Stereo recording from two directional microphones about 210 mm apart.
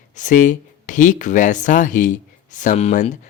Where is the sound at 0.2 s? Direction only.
40° left (ahead or behind).